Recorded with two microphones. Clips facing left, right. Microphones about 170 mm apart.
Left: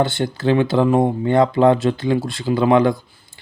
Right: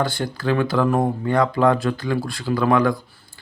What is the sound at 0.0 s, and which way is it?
Speech, 25° left (ahead or behind).